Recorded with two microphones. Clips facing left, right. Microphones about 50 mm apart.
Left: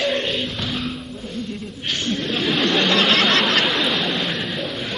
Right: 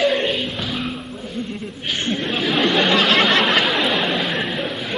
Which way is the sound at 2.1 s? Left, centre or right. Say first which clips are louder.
Right 1 dB; centre.